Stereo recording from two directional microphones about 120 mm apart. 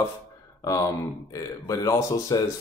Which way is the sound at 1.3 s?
25° left (ahead or behind).